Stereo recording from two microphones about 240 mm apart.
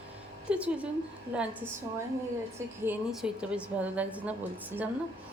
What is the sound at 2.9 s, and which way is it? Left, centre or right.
A woman's voice, centre.